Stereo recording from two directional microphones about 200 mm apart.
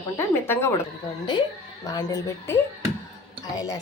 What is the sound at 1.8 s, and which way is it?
A woman's voice, 15° left (ahead or behind).